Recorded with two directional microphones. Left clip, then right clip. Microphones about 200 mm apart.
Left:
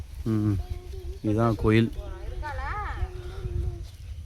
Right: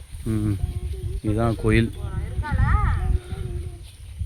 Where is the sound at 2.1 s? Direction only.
40° left (ahead or behind).